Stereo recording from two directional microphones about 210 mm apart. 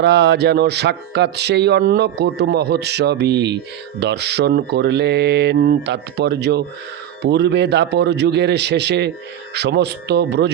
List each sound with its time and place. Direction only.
0.0 s music: 55° right (ahead or behind)